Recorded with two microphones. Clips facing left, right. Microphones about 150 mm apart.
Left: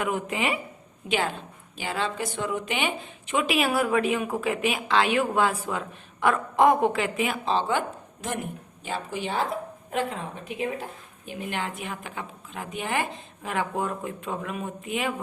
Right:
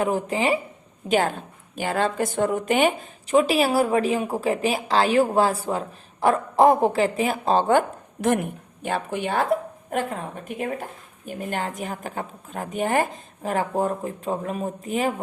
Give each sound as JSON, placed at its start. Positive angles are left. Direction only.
{"t": 0.0, "sound": "a woman's voice", "side_deg": -35}
{"t": 1.0, "sound": "a woman's voice", "side_deg": -45}